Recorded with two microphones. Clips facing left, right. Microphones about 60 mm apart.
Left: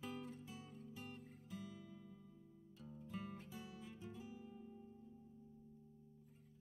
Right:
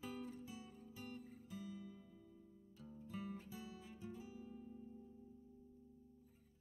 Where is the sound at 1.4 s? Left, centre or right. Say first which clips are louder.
Right 1 dB; left.